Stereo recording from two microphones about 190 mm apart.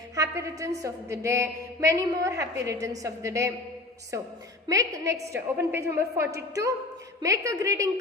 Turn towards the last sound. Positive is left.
turn(degrees=-15)  # may be behind; listen again after turning